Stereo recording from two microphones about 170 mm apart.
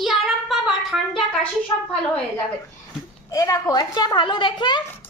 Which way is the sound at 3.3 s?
20° left (ahead or behind).